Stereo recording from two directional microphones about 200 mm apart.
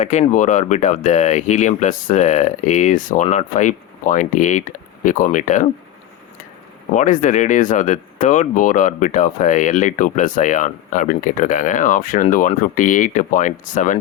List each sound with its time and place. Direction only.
0.0 s speech: 35° left (ahead or behind)
6.9 s speech: 40° left (ahead or behind)